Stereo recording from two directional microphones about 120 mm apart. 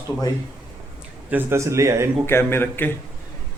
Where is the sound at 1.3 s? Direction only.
20° right (ahead or behind).